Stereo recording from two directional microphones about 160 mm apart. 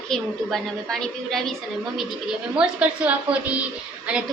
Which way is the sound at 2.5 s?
10° right (ahead or behind).